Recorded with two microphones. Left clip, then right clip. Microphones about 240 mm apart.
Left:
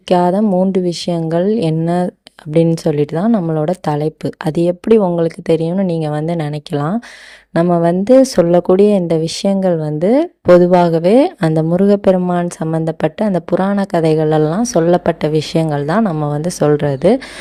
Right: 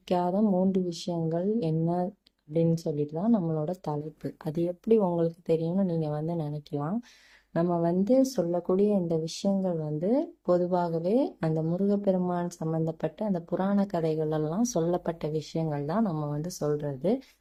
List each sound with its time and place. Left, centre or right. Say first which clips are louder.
0.1 s speech: left 14 dB; left